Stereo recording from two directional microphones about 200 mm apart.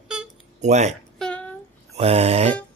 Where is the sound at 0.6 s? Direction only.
35° right (ahead or behind).